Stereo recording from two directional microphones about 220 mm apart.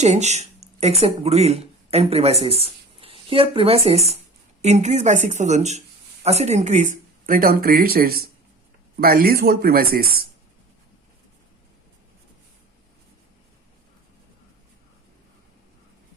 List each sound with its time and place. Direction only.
0.0 s speech: 30° right (ahead or behind)